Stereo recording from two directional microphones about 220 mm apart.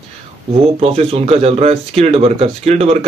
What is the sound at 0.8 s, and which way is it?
Speech, 25° right (ahead or behind).